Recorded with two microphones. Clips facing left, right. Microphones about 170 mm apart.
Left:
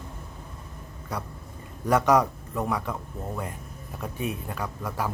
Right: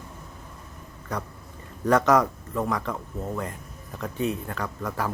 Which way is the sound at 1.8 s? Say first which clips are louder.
Right 1 dB; 10° left (ahead or behind).